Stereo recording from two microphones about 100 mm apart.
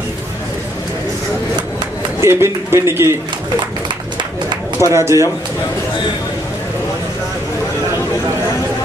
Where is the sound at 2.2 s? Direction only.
25° right (ahead or behind).